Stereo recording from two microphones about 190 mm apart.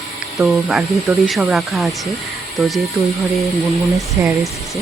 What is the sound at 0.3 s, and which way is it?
Speech, centre (ahead or behind).